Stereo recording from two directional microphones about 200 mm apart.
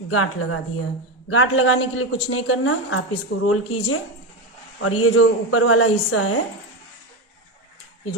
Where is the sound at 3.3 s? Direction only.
65° left (ahead or behind).